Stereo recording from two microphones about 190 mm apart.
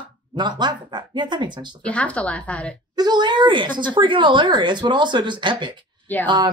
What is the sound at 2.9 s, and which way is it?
Speech, 20° right (ahead or behind).